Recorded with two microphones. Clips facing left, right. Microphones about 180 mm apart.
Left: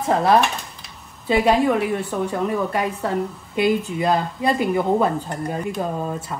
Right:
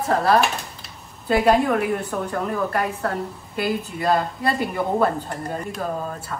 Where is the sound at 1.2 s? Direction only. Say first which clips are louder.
Left 1 dB; centre (ahead or behind).